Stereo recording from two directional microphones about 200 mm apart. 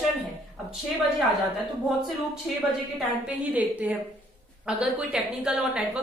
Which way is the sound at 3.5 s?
10° right (ahead or behind).